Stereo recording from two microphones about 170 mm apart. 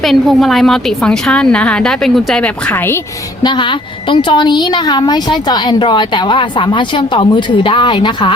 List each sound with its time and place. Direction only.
0.0 s a woman's voice: centre (ahead or behind)
3.4 s a woman's voice: 30° left (ahead or behind)